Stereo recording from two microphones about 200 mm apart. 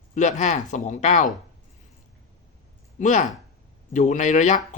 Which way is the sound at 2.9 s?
40° left (ahead or behind).